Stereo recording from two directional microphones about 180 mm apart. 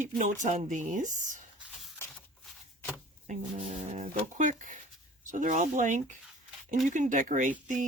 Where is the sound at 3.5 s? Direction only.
35° right (ahead or behind).